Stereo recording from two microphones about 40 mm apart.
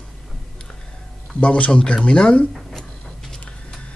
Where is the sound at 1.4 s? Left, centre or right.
Left.